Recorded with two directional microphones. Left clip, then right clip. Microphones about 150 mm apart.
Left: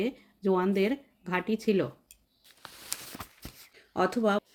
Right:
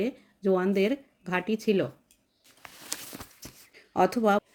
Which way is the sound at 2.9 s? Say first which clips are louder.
Right 2 dB; 15° left (ahead or behind).